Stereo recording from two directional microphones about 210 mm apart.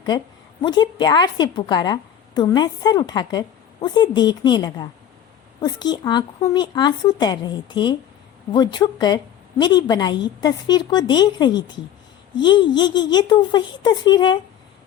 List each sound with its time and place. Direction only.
0.6 s a woman's voice: 20° left (ahead or behind)